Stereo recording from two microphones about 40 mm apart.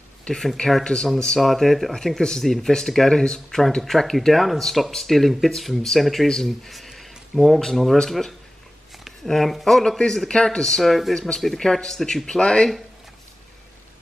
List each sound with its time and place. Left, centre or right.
0.3 s speech: left
1.4 s speech: centre
9.8 s speech: centre